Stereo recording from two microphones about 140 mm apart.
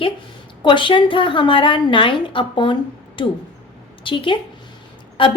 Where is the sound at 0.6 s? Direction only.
35° left (ahead or behind).